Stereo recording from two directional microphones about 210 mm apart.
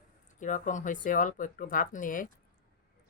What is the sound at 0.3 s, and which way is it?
Speech, 35° left (ahead or behind).